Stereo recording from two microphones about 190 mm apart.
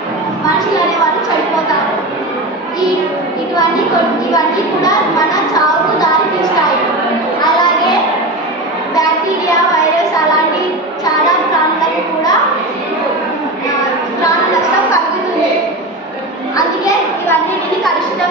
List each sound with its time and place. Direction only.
16.5 s children playing: 20° left (ahead or behind)